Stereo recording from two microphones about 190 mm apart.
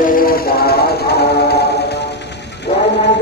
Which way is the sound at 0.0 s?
50° left (ahead or behind).